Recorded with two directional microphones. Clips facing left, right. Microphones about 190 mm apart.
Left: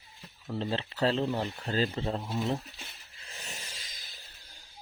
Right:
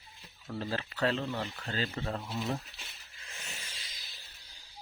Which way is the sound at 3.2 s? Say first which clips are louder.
Left 3 dB; 35° left (ahead or behind).